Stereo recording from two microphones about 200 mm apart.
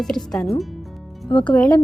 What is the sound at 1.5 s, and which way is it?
Speech, 5° left (ahead or behind).